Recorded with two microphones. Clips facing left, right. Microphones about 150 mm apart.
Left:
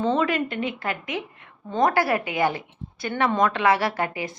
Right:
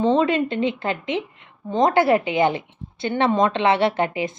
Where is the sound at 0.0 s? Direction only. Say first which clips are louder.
Right 4 dB; 20° right (ahead or behind).